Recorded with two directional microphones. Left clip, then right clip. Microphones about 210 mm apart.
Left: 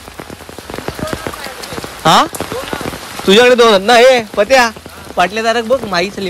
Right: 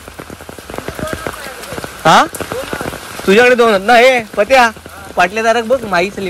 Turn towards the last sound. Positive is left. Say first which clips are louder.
# right 1 dB
turn(degrees=10)  # may be behind; listen again after turning